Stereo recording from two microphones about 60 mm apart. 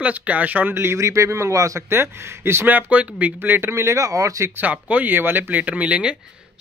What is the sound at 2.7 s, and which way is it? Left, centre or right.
Speech, right.